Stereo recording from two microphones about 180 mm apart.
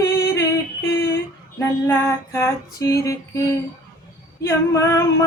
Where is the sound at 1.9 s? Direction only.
15° left (ahead or behind).